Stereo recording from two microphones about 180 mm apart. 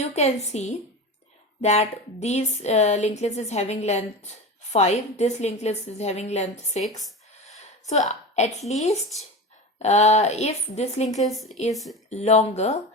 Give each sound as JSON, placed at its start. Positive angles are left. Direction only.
{"t": 0.0, "sound": "a woman's voice", "side_deg": 40}
{"t": 8.4, "sound": "a woman's voice", "side_deg": 40}
{"t": 11.2, "sound": "a woman's voice", "side_deg": 0}
{"t": 12.1, "sound": "a woman's voice", "side_deg": 40}